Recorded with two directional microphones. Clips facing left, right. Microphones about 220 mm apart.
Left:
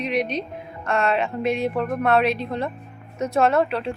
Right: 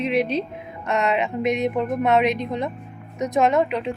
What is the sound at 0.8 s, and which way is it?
Speech, 20° right (ahead or behind).